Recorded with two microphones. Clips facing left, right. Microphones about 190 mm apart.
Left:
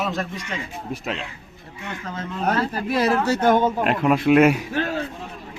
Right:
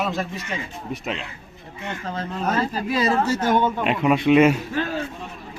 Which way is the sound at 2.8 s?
65° left (ahead or behind).